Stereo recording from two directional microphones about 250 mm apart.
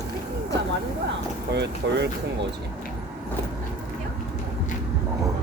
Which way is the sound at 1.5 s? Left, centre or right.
Right.